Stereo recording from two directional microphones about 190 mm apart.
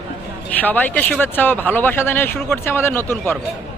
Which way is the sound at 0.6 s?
10° left (ahead or behind).